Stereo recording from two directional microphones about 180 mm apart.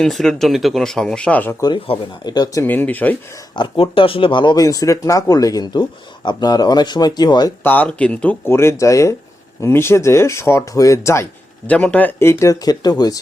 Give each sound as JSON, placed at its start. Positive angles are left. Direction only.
{"t": 0.0, "sound": "speech", "side_deg": 0}
{"t": 1.6, "sound": "speech", "side_deg": 25}
{"t": 3.5, "sound": "speech", "side_deg": 25}
{"t": 7.6, "sound": "speech", "side_deg": 10}